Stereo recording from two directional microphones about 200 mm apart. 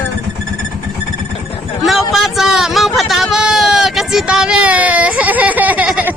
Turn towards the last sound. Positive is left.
turn(degrees=-5)  # may be behind; listen again after turning